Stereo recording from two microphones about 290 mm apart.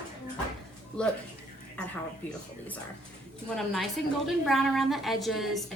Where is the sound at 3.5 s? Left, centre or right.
Centre.